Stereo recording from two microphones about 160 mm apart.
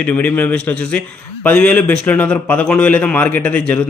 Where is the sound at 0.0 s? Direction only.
10° left (ahead or behind).